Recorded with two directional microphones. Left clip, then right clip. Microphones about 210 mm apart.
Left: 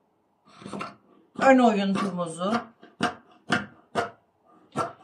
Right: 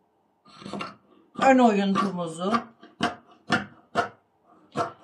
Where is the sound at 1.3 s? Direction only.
10° left (ahead or behind).